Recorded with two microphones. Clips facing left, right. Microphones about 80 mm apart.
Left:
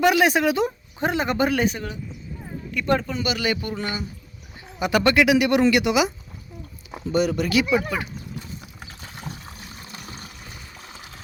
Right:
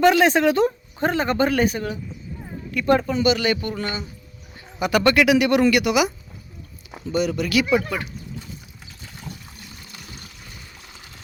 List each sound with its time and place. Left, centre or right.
0.0 s speech: centre
7.1 s speech: left
8.8 s pour: left
9.8 s water: left